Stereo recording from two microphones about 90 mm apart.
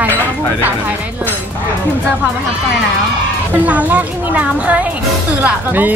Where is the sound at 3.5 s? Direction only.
15° right (ahead or behind).